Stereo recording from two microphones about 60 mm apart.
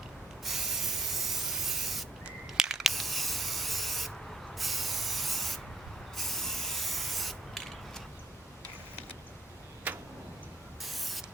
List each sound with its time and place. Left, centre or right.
0.4 s spray: centre
9.9 s tick-tock: right
10.8 s spray: centre